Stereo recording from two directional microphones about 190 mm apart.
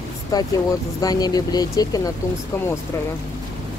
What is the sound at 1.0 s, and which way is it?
Speech, 20° left (ahead or behind).